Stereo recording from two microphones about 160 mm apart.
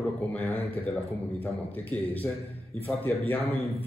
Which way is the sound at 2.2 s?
15° left (ahead or behind).